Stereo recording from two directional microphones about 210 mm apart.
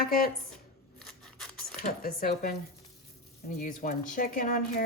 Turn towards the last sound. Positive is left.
turn(degrees=40)  # may be behind; listen again after turning